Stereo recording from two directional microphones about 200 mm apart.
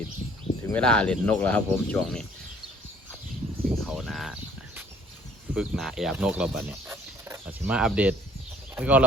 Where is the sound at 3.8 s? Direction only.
Centre (ahead or behind).